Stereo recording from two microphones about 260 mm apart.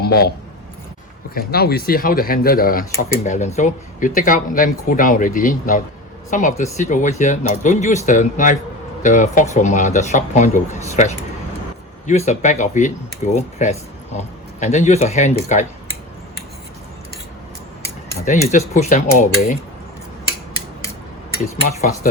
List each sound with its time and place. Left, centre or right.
0.0 s speech: left
18.3 s speech: left
21.8 s speech: left